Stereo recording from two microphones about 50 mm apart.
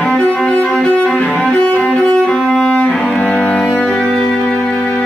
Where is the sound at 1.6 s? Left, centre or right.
Centre.